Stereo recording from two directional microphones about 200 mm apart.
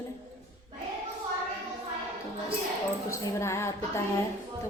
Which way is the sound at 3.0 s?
15° left (ahead or behind).